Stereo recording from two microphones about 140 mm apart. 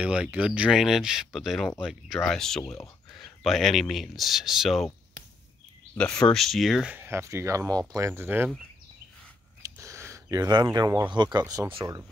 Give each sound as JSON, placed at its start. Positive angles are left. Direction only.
{"t": 0.0, "sound": "speech", "side_deg": -10}
{"t": 6.2, "sound": "speech", "side_deg": 0}
{"t": 9.6, "sound": "a sound", "side_deg": -20}
{"t": 11.1, "sound": "speech", "side_deg": -30}